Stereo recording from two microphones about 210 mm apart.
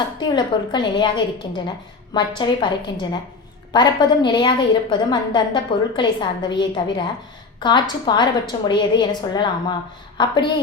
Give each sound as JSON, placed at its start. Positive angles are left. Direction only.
{"t": 0.2, "sound": "a woman's voice", "side_deg": 20}